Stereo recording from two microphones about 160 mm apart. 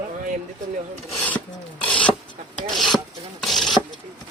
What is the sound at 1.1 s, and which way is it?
Filing, 5° left (ahead or behind).